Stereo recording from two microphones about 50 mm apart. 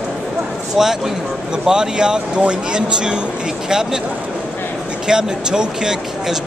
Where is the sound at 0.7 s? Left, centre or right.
Centre.